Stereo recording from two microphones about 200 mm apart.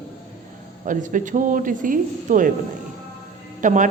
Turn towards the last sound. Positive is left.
turn(degrees=-40)  # may be behind; listen again after turning